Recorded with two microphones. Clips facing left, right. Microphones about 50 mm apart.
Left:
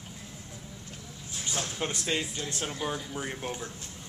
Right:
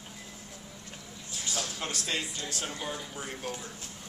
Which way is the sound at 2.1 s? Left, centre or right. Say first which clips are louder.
Left 3 dB; centre.